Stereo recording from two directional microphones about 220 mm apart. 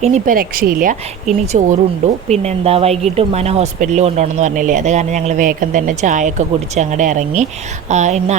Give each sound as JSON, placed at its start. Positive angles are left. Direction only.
{"t": 0.0, "sound": "speech", "side_deg": -35}